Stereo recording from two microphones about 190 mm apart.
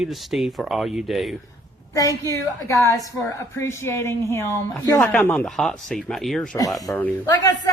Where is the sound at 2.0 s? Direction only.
15° left (ahead or behind).